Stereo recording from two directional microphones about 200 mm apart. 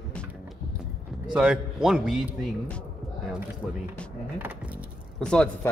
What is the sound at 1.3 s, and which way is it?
A man's voice, 5° right (ahead or behind).